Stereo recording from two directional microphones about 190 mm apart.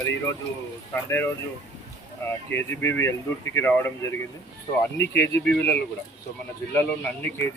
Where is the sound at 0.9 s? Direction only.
10° left (ahead or behind).